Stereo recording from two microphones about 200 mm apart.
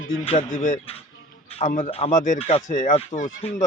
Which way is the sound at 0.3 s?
40° left (ahead or behind).